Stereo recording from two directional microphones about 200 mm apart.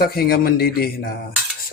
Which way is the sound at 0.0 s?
50° left (ahead or behind).